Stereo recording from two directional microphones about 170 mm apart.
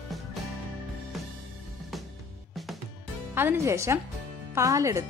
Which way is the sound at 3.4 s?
15° right (ahead or behind).